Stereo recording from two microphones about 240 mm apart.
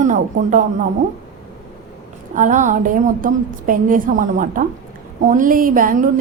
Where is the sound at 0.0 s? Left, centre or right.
Right.